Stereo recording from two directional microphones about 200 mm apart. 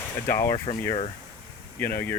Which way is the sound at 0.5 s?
30° left (ahead or behind).